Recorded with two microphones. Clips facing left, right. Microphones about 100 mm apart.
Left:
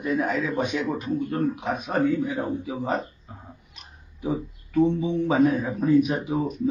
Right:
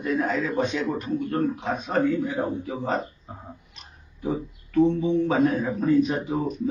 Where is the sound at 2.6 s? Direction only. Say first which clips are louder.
Even; centre (ahead or behind).